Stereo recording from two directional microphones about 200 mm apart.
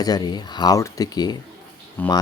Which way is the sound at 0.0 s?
20° left (ahead or behind).